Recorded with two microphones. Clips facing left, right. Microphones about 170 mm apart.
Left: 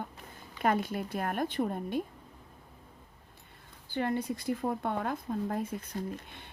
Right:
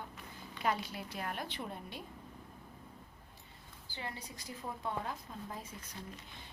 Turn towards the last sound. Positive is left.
turn(degrees=55)  # may be behind; listen again after turning